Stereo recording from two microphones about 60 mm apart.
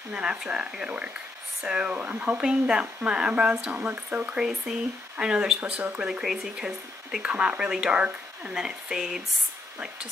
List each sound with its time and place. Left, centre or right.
0.1 s speech: centre
4.4 s speech: centre
6.2 s speech: centre